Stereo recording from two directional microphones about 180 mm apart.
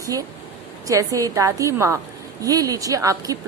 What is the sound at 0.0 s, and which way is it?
A woman's voice, 20° right (ahead or behind).